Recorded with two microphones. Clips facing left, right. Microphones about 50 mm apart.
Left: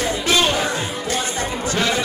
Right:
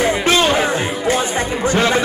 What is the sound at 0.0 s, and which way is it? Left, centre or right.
Music, right.